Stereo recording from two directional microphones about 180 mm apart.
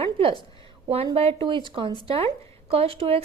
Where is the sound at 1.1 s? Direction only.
30° right (ahead or behind).